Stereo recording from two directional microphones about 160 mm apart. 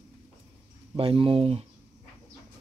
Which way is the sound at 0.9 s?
35° right (ahead or behind).